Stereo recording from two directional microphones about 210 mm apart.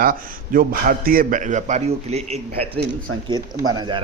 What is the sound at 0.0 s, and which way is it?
Speech, 45° right (ahead or behind).